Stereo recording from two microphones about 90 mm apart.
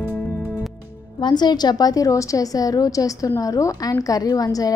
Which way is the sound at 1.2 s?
50° left (ahead or behind).